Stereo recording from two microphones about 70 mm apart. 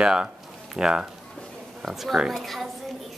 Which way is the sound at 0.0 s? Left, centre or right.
Centre.